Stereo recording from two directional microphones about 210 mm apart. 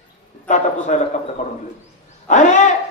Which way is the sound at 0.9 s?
35° left (ahead or behind).